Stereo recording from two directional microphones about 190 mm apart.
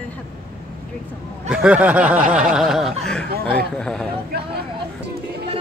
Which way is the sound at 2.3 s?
5° right (ahead or behind).